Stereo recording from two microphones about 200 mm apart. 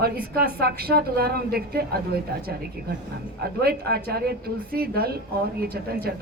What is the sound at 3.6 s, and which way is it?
A woman's voice, 50° right (ahead or behind).